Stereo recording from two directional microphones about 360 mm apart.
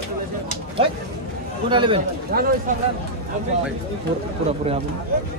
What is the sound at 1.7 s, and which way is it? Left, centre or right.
Speech, centre.